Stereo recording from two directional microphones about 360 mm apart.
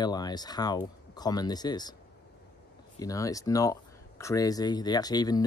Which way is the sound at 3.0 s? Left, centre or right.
Centre.